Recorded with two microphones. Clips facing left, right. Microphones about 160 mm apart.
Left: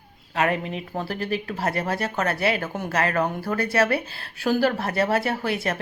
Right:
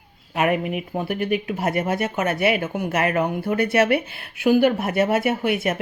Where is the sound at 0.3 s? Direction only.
15° right (ahead or behind).